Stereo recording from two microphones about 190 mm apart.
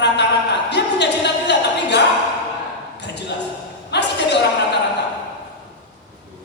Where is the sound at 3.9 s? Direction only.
65° left (ahead or behind).